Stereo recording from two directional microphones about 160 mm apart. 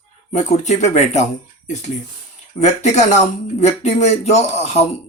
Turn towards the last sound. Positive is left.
turn(degrees=40)  # may be behind; listen again after turning